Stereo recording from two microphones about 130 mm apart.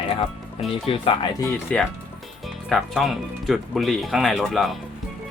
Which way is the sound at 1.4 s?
20° left (ahead or behind).